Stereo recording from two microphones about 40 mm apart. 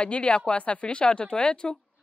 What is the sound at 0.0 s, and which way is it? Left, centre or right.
A woman's voice, left.